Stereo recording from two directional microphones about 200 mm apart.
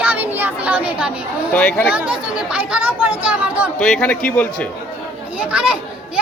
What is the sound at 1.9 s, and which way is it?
Speech, 5° right (ahead or behind).